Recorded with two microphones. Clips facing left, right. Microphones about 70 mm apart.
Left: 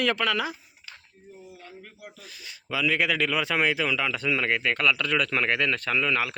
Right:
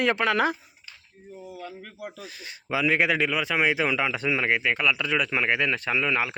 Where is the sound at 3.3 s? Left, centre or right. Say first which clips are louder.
Even; centre.